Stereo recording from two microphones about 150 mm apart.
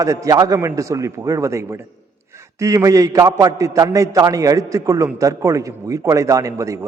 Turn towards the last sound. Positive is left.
turn(degrees=-20)  # may be behind; listen again after turning